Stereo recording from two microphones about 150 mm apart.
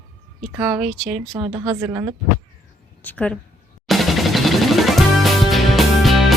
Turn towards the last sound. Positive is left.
turn(degrees=0)  # may be behind; listen again after turning